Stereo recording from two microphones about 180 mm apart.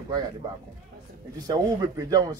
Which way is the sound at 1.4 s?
20° right (ahead or behind).